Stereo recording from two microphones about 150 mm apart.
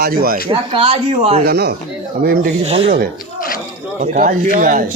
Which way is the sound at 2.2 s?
75° right (ahead or behind).